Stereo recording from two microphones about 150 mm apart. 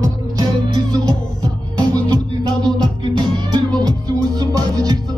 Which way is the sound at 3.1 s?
30° right (ahead or behind).